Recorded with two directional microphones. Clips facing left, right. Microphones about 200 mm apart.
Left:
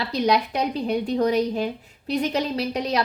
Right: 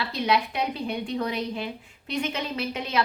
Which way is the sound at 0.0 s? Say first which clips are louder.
Left 4 dB; 40° left (ahead or behind).